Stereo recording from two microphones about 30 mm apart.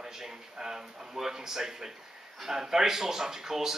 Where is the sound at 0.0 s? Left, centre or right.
Centre.